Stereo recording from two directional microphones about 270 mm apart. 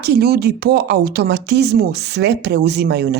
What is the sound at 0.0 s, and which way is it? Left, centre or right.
A woman's voice, right.